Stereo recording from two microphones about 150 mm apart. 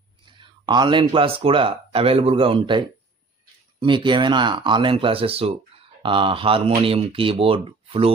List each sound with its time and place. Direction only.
0.3 s speech: 30° right (ahead or behind)